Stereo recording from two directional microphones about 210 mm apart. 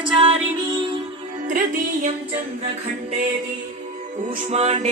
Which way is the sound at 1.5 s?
40° right (ahead or behind).